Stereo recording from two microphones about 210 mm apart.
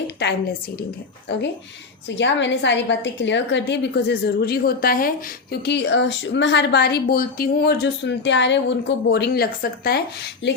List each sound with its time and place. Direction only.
0.2 s a woman's voice: 50° left (ahead or behind)
2.0 s a woman's voice: 55° left (ahead or behind)